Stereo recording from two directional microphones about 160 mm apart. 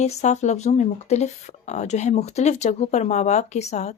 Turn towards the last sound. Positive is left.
turn(degrees=45)  # may be behind; listen again after turning